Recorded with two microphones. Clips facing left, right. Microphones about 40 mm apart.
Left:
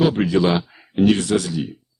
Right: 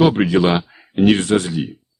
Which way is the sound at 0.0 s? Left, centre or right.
Right.